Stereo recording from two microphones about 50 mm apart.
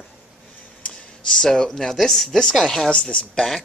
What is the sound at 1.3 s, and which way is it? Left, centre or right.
A woman's voice, centre.